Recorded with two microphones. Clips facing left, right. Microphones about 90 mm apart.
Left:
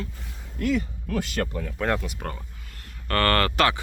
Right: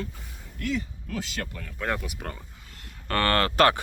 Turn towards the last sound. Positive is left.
turn(degrees=-20)  # may be behind; listen again after turning